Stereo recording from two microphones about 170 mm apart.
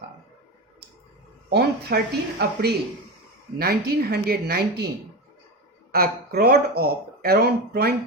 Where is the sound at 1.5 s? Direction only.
70° right (ahead or behind).